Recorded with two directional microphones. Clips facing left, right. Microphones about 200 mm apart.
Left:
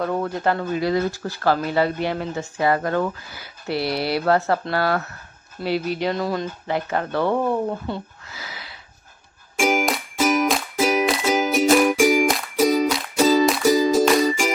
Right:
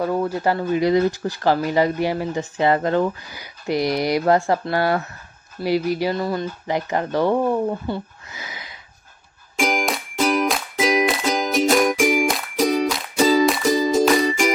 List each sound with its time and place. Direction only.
0.0 s speech: 10° right (ahead or behind)
6.7 s speech: 15° right (ahead or behind)
7.7 s speech: 5° right (ahead or behind)
8.3 s a sound: 15° right (ahead or behind)
9.6 s music: 5° left (ahead or behind)